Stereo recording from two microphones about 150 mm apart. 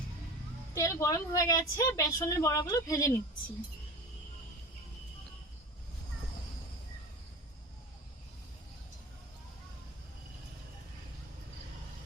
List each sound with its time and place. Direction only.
0.7 s a woman's voice: 20° left (ahead or behind)